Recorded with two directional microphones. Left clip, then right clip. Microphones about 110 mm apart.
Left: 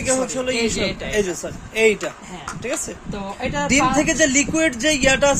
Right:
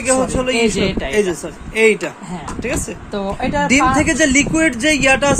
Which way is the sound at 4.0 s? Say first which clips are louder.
Right 3 dB; 15° left (ahead or behind).